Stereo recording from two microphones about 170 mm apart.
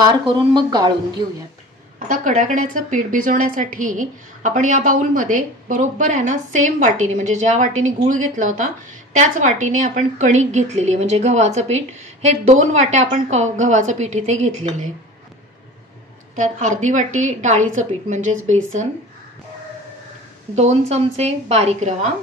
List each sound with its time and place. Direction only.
0.0 s speech: 25° right (ahead or behind)
2.0 s a woman's voice: 50° right (ahead or behind)
16.3 s a woman's voice: 45° right (ahead or behind)
20.5 s a woman's voice: 40° right (ahead or behind)